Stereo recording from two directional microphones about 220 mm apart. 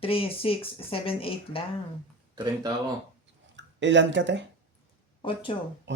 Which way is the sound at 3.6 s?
55° right (ahead or behind).